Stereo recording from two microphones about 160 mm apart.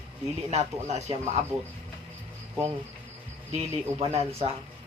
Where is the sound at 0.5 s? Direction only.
45° right (ahead or behind).